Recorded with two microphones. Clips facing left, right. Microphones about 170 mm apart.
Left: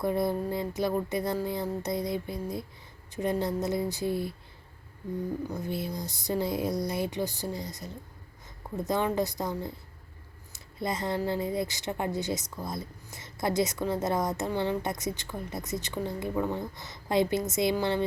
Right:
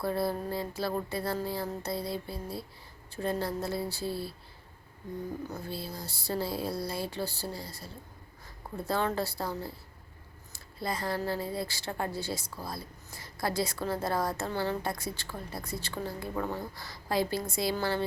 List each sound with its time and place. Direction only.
0.0 s a woman's voice: 20° left (ahead or behind)
5.5 s a woman's voice: 20° left (ahead or behind)
10.5 s a sound: 20° left (ahead or behind)
11.3 s a woman's voice: 20° left (ahead or behind)